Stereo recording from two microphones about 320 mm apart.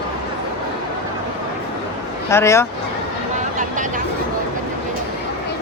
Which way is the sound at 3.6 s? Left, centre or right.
Right.